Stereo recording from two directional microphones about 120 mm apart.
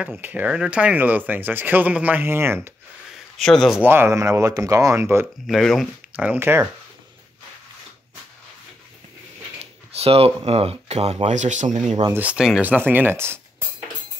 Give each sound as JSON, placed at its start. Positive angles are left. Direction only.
{"t": 0.0, "sound": "speech", "side_deg": -15}
{"t": 3.3, "sound": "speech", "side_deg": 0}
{"t": 3.8, "sound": "speech", "side_deg": -20}
{"t": 5.5, "sound": "speech", "side_deg": 0}
{"t": 6.1, "sound": "speech", "side_deg": -15}
{"t": 9.6, "sound": "speech", "side_deg": -55}
{"t": 12.1, "sound": "speech", "side_deg": -10}